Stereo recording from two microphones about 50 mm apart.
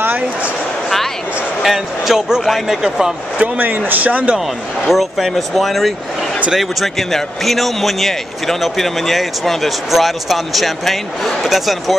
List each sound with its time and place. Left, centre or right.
1.6 s speech: centre
3.3 s speech: right
4.8 s speech: centre